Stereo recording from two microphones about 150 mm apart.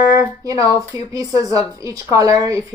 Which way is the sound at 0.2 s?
20° right (ahead or behind).